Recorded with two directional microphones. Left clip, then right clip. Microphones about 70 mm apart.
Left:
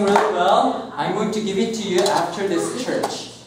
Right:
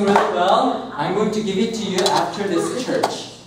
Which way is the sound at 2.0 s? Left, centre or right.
Right.